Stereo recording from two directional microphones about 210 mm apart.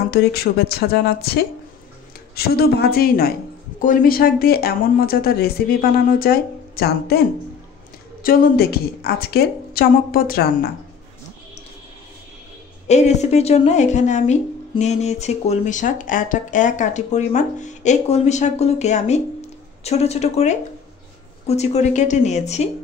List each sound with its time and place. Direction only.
0.1 s speech: 50° left (ahead or behind)
12.8 s a woman's voice: 35° left (ahead or behind)